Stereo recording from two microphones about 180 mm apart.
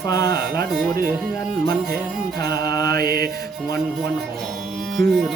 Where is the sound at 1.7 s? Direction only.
60° right (ahead or behind).